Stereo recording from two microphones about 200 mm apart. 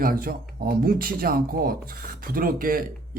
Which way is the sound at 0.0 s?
45° right (ahead or behind).